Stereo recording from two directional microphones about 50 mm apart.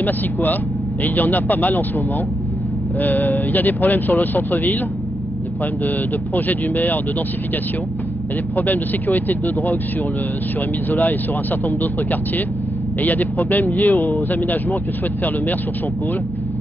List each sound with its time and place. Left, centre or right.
0.0 s speech: left
3.0 s speech: left
5.9 s speech: left
8.5 s speech: left
10.9 s speech: left